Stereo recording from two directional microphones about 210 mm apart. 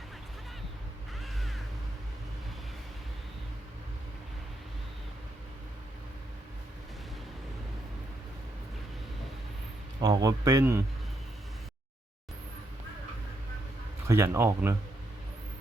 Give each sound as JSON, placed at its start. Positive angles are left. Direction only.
{"t": 1.2, "sound": "music", "side_deg": 0}
{"t": 10.0, "sound": "a man's voice", "side_deg": -20}
{"t": 14.1, "sound": "a man's voice", "side_deg": -15}